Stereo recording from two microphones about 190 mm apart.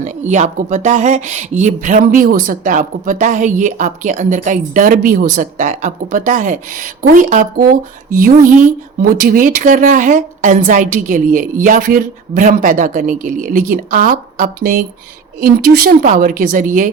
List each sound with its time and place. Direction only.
0.0 s speech: 40° right (ahead or behind)